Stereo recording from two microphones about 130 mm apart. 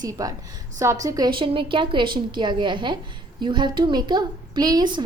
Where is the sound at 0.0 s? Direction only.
25° right (ahead or behind).